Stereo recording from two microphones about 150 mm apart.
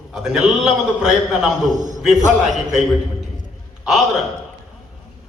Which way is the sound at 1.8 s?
55° right (ahead or behind).